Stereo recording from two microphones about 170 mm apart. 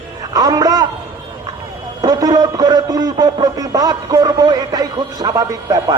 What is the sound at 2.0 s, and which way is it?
A man's voice, 25° right (ahead or behind).